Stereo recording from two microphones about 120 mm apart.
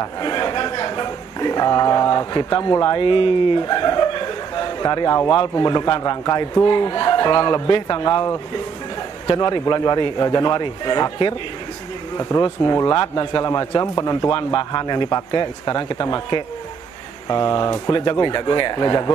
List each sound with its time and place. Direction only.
0.0 s a man's voice: 35° left (ahead or behind)
3.6 s chuckle: 35° left (ahead or behind)
5.6 s speech: 35° left (ahead or behind)
12.2 s speech: 25° left (ahead or behind)